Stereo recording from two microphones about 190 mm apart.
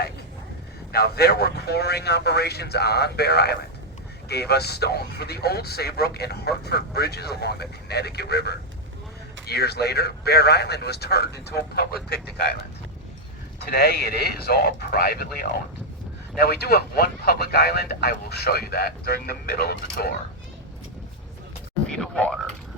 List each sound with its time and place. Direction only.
0.9 s speech: 55° left (ahead or behind)
13.7 s speech: 55° left (ahead or behind)
21.8 s a sound: 5° left (ahead or behind)